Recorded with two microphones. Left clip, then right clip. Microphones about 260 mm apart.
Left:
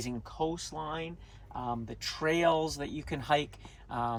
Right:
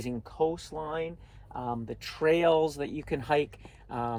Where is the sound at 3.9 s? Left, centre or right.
Left.